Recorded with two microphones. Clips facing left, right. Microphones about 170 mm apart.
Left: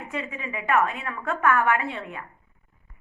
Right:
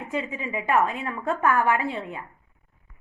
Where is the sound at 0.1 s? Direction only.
30° right (ahead or behind).